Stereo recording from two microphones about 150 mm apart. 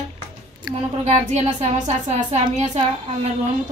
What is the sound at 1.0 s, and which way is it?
A woman's voice, 50° right (ahead or behind).